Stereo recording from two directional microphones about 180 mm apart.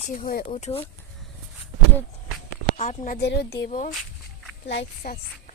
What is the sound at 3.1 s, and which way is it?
Speech, 65° left (ahead or behind).